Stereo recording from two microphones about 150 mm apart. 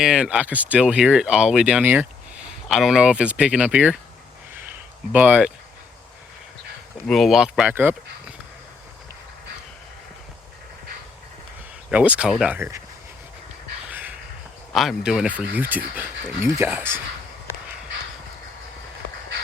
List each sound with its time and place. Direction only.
0.0 s speech: 5° right (ahead or behind)
5.1 s speech: 10° right (ahead or behind)
7.1 s speech: centre (ahead or behind)
11.9 s speech: 10° right (ahead or behind)
12.5 s speech: 20° right (ahead or behind)
14.7 s speech: centre (ahead or behind)